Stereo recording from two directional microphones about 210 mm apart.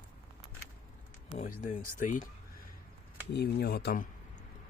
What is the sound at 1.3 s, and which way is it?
Speech, 35° left (ahead or behind).